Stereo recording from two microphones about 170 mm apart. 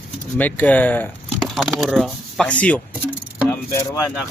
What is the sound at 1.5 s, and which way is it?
A man's voice, centre (ahead or behind).